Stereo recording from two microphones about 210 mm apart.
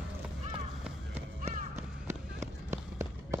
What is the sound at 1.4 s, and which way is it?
Run, 35° right (ahead or behind).